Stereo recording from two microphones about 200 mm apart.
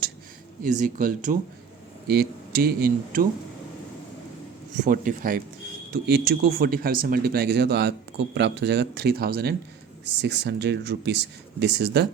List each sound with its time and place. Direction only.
0.6 s speech: 40° right (ahead or behind)
4.8 s speech: 40° right (ahead or behind); by 12.0 s 55° right (ahead or behind)